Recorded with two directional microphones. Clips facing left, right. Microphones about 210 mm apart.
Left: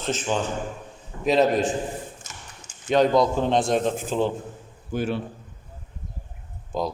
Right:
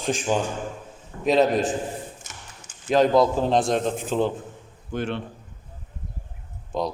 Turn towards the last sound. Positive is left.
turn(degrees=0)  # may be behind; listen again after turning